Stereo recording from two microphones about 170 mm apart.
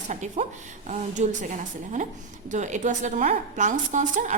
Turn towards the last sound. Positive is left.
turn(degrees=-45)  # may be behind; listen again after turning